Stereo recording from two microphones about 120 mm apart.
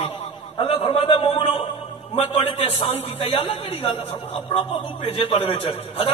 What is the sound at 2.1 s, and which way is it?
A man's voice, 65° left (ahead or behind).